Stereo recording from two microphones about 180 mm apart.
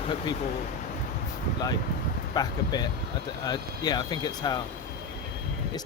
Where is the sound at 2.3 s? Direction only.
20° left (ahead or behind).